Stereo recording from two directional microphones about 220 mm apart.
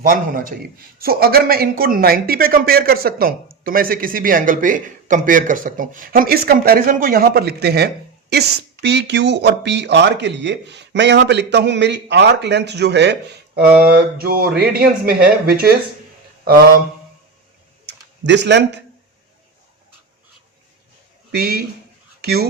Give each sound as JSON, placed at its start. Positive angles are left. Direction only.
{"t": 0.0, "sound": "a man's voice", "side_deg": -40}
{"t": 18.3, "sound": "speech", "side_deg": -50}
{"t": 21.3, "sound": "speech", "side_deg": -45}